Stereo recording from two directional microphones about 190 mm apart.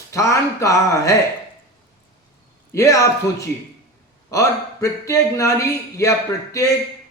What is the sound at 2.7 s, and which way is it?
A man's voice, 15° left (ahead or behind).